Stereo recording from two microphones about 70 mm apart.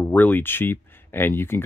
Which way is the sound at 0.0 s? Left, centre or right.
Left.